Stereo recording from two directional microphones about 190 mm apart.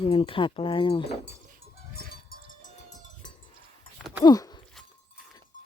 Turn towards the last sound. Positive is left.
turn(degrees=20)  # may be behind; listen again after turning